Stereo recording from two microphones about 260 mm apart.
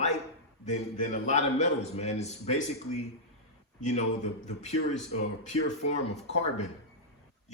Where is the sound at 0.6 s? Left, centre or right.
Left.